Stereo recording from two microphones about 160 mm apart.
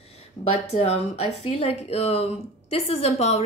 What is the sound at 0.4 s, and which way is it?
Speech, 35° left (ahead or behind).